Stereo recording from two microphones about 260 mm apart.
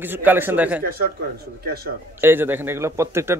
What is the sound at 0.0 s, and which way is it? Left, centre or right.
Speech, centre.